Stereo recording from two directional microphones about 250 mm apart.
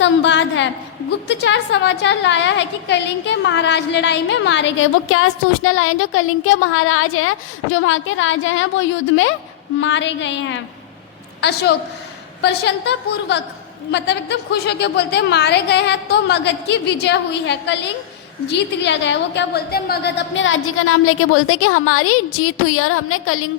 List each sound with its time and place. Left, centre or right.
0.0 s a woman's voice: left